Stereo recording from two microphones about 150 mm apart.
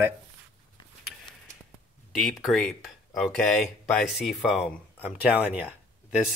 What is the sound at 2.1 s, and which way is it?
Speech, centre (ahead or behind).